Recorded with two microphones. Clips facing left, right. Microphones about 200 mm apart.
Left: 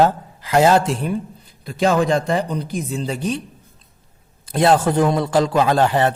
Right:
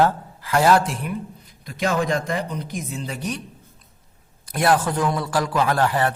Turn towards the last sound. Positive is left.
turn(degrees=25)  # may be behind; listen again after turning